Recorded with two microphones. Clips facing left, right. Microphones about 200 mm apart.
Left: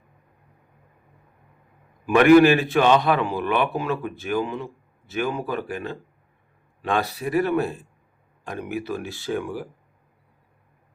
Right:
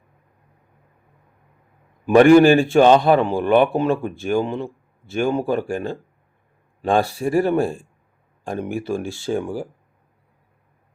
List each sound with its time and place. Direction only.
2.0 s a man's voice: 30° right (ahead or behind)